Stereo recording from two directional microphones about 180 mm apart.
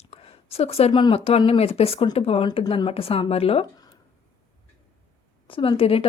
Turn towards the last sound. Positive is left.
turn(degrees=30)  # may be behind; listen again after turning